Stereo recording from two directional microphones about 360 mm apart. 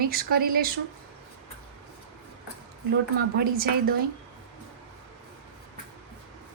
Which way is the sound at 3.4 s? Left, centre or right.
Right.